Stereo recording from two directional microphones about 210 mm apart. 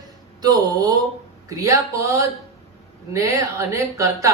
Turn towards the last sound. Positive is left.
turn(degrees=-15)  # may be behind; listen again after turning